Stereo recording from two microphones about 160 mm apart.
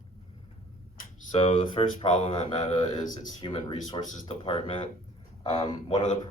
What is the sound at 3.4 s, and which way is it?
Speech, 25° left (ahead or behind).